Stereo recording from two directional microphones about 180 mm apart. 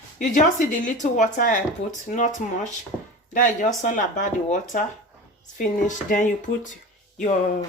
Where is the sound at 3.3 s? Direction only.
45° left (ahead or behind).